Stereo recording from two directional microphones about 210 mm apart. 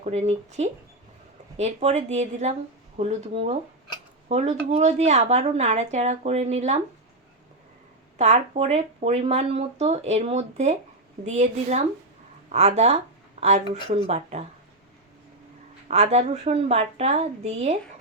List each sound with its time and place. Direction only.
0.0 s speech: 30° right (ahead or behind)
8.2 s speech: 35° right (ahead or behind)
14.1 s speech: 30° right (ahead or behind)
15.9 s speech: 30° right (ahead or behind)